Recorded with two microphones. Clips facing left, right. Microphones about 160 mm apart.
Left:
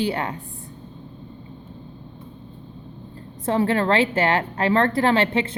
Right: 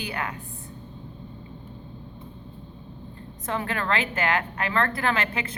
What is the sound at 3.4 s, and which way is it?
A woman's voice, 30° left (ahead or behind).